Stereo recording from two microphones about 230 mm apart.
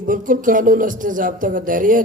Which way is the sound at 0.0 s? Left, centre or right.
Right.